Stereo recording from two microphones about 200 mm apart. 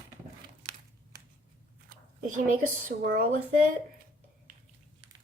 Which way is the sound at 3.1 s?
45° right (ahead or behind).